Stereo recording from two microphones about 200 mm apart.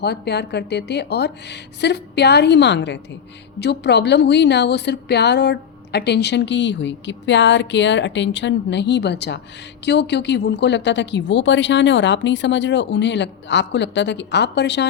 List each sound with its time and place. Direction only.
0.0 s a woman's voice: 55° left (ahead or behind)